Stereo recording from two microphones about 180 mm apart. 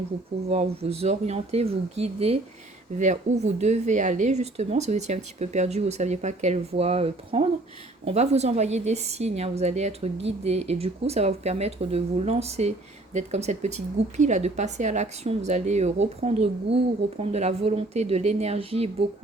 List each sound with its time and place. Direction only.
0.4 s speech: 35° right (ahead or behind)